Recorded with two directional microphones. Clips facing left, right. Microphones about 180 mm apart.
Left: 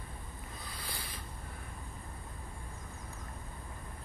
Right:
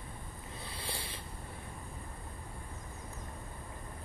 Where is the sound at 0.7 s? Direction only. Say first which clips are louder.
Right 3 dB; 25° right (ahead or behind).